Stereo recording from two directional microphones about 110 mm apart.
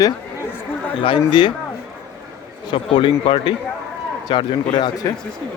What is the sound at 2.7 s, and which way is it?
Speech, 50° left (ahead or behind).